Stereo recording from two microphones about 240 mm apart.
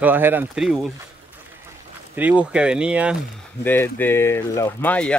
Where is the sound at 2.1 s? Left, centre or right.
Centre.